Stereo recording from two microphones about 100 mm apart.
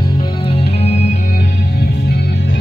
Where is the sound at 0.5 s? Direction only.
85° left.